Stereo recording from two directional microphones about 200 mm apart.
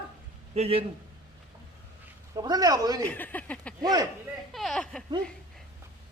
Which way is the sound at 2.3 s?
20° right (ahead or behind).